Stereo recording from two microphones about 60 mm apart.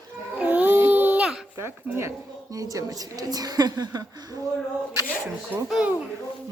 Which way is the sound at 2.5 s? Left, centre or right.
Right.